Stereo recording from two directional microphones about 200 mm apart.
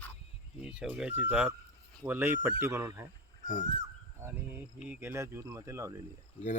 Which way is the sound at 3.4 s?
40° left (ahead or behind).